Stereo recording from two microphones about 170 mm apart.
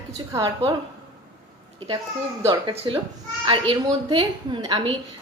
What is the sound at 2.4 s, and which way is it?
A woman's voice, 25° right (ahead or behind).